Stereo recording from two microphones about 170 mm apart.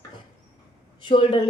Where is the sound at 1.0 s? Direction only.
30° left (ahead or behind).